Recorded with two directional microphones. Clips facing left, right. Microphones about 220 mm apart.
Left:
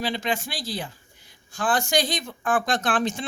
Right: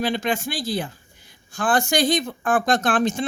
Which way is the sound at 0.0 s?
50° right (ahead or behind).